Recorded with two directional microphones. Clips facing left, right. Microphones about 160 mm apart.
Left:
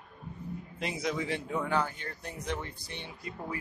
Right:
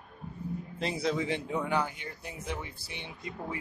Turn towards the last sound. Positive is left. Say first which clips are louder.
# right 1 dB
turn(degrees=-20)  # may be behind; listen again after turning